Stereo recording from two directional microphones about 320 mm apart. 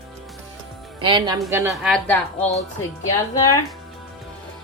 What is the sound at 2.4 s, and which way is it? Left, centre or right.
Speech, left.